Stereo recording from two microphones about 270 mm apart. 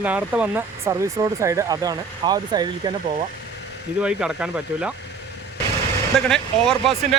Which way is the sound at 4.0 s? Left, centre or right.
Centre.